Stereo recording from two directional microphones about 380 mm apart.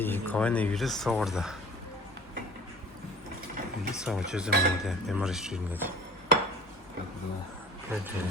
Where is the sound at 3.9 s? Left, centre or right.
Centre.